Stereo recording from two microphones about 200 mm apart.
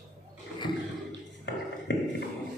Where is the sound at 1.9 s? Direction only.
65° left (ahead or behind).